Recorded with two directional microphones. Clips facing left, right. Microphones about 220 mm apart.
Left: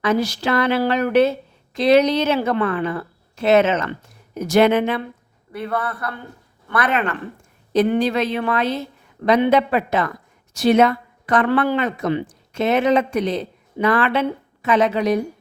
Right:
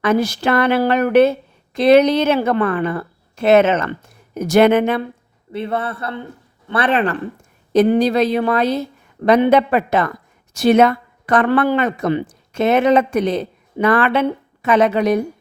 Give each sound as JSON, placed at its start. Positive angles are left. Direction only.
{"t": 0.0, "sound": "a woman's voice", "side_deg": -55}
{"t": 5.5, "sound": "a man's voice", "side_deg": -25}
{"t": 9.2, "sound": "speech", "side_deg": -50}